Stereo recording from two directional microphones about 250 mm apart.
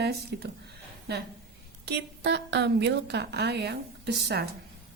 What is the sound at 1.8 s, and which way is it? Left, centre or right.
A woman's voice, right.